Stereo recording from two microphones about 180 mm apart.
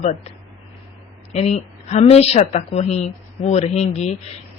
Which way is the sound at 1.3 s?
35° left (ahead or behind).